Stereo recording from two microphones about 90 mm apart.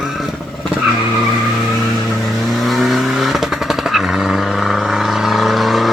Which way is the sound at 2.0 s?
Centre (ahead or behind).